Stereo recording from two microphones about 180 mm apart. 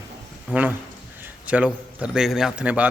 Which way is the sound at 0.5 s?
5° right (ahead or behind).